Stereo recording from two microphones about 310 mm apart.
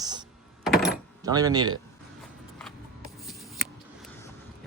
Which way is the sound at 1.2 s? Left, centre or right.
Centre.